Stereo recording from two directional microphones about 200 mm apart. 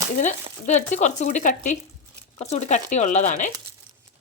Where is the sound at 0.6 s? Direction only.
35° left (ahead or behind).